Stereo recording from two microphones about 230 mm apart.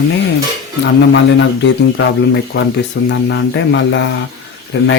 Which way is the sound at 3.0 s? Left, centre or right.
Left.